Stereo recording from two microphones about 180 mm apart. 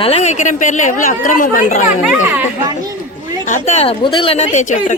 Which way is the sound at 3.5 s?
40° left (ahead or behind).